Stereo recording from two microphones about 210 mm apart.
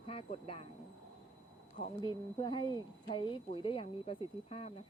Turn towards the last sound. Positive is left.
turn(degrees=30)  # may be behind; listen again after turning